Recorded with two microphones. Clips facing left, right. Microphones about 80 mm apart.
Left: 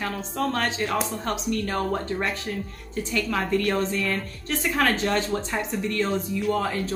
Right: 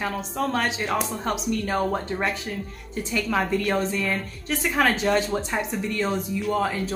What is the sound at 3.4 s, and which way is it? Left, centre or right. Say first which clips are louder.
A woman's voice: even; centre.